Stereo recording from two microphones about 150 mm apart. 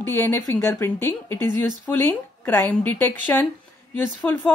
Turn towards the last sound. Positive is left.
turn(degrees=10)  # may be behind; listen again after turning